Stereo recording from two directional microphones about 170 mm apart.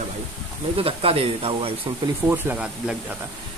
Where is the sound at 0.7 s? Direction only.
35° right (ahead or behind).